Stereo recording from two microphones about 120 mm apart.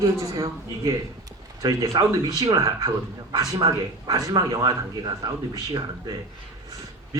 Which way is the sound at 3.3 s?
30° right (ahead or behind).